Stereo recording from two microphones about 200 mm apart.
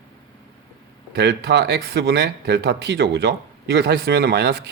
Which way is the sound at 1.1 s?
55° right (ahead or behind).